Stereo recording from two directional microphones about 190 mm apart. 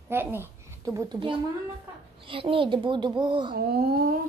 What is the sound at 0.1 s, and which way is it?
A child's voice, 10° right (ahead or behind).